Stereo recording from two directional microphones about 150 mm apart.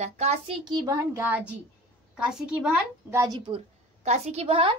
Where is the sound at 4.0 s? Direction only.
50° right (ahead or behind).